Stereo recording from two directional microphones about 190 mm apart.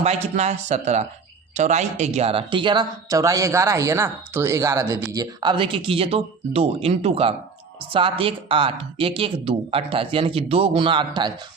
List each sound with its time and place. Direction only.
0.0 s speech: 35° right (ahead or behind)